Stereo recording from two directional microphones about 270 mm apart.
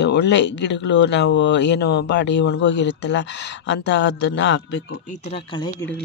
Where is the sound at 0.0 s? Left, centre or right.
Left; by 5.9 s centre.